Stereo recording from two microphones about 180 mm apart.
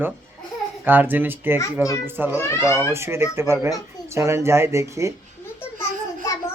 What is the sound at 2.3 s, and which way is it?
Speech, 15° left (ahead or behind).